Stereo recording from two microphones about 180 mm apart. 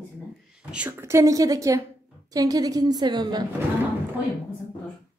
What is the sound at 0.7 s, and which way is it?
A woman's voice, 10° right (ahead or behind).